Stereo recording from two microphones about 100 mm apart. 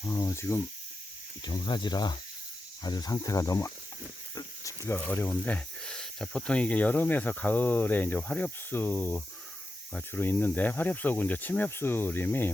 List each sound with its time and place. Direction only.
0.0 s speech: 30° left (ahead or behind)
1.4 s speech: 45° left (ahead or behind); by 12.5 s 20° left (ahead or behind)